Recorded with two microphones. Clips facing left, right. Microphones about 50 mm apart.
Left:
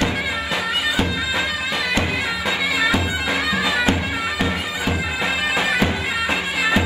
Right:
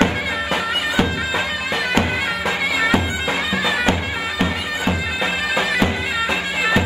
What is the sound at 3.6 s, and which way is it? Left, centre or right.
Music, right.